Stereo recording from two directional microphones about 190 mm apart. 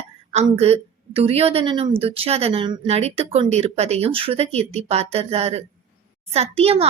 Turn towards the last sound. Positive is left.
turn(degrees=-30)  # may be behind; listen again after turning